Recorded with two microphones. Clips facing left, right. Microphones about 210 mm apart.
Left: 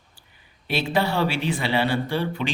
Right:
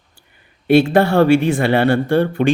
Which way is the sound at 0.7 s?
50° right (ahead or behind).